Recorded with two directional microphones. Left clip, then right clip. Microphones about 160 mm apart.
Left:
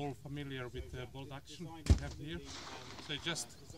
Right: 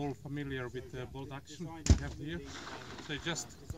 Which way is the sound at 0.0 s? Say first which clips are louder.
Right 4 dB; 15° left (ahead or behind).